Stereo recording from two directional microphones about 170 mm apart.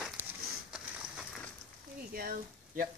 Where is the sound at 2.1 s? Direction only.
55° right (ahead or behind).